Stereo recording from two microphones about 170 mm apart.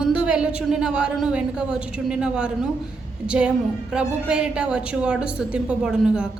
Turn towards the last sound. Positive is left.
turn(degrees=-5)  # may be behind; listen again after turning